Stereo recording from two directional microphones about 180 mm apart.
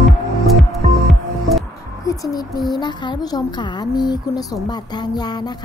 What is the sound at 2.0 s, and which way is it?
A child's voice, 20° left (ahead or behind).